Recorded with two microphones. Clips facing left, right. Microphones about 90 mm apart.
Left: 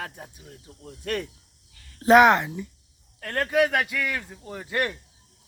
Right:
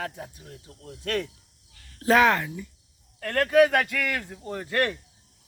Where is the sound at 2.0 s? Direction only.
20° left (ahead or behind).